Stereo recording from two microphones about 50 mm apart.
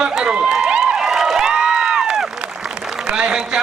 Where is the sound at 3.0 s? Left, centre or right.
Centre.